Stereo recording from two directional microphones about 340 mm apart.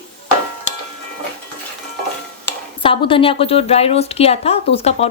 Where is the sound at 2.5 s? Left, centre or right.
Centre.